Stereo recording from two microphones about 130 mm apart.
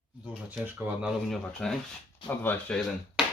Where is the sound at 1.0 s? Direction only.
5° left (ahead or behind).